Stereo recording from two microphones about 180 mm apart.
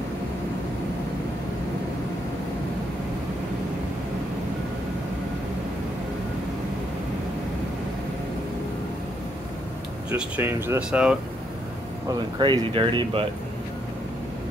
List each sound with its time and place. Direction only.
10.1 s speech: 10° right (ahead or behind)
12.1 s speech: 25° right (ahead or behind)